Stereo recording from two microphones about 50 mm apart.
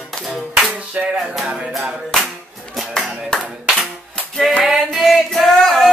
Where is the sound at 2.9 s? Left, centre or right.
Centre.